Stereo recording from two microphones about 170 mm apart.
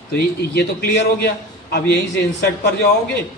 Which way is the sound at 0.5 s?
70° left (ahead or behind).